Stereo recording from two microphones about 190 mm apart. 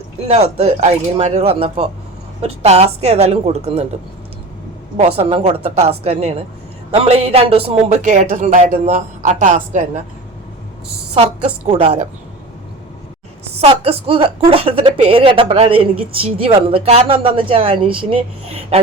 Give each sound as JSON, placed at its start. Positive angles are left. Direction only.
{"t": 0.3, "sound": "speech", "side_deg": -35}
{"t": 4.9, "sound": "speech", "side_deg": -30}
{"t": 11.1, "sound": "a woman's voice", "side_deg": -30}
{"t": 13.4, "sound": "a woman's voice", "side_deg": -30}